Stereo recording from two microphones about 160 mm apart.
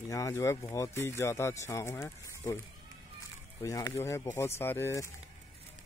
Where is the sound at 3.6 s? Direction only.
20° left (ahead or behind).